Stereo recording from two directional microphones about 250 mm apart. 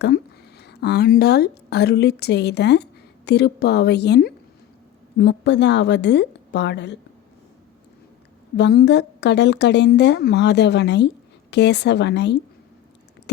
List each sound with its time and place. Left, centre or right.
0.6 s a woman's voice: left
8.5 s a woman's voice: left